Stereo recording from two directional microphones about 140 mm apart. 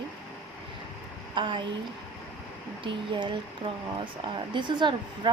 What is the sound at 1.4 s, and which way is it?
Speech, 35° right (ahead or behind).